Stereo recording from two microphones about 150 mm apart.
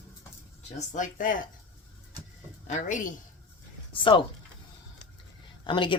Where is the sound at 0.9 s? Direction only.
60° left (ahead or behind).